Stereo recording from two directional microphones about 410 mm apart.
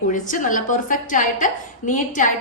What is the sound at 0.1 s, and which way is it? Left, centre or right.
A woman's voice, centre.